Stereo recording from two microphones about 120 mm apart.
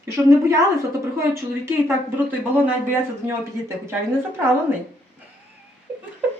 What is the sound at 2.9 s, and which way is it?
Speech, 20° right (ahead or behind).